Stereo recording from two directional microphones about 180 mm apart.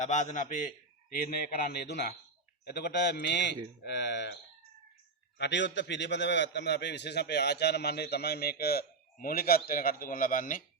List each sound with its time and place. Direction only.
0.0 s a man's voice: 40° left (ahead or behind); by 4.4 s 70° left (ahead or behind)
5.4 s a man's voice: 80° left; by 10.6 s 50° left (ahead or behind)